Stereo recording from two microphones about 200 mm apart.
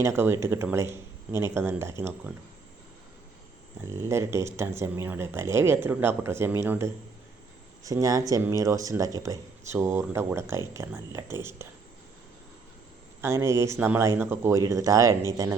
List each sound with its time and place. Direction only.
0.0 s speech: 15° right (ahead or behind)
3.8 s speech: 15° right (ahead or behind)
13.2 s speech: 15° right (ahead or behind)